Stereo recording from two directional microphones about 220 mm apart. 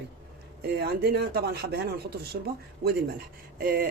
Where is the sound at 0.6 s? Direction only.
45° right (ahead or behind).